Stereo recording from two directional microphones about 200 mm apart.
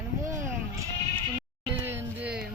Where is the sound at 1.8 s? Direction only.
10° right (ahead or behind).